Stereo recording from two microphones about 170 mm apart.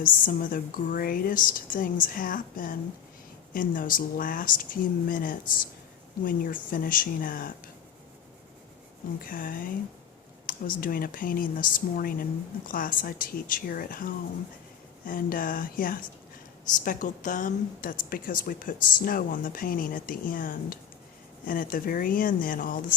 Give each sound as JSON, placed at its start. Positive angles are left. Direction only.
{"t": 0.0, "sound": "a woman's voice", "side_deg": 55}
{"t": 9.1, "sound": "a woman's voice", "side_deg": 55}